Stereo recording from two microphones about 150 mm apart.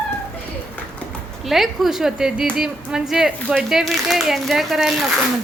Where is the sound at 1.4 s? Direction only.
Centre (ahead or behind).